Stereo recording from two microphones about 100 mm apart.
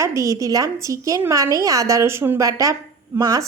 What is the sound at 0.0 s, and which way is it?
A woman's voice, 30° right (ahead or behind).